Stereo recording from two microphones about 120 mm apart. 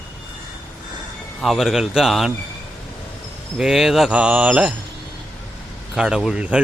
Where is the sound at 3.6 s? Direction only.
5° right (ahead or behind).